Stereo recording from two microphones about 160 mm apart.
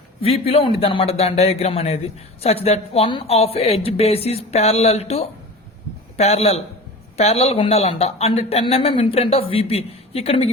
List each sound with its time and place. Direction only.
0.2 s a man's voice: 40° left (ahead or behind)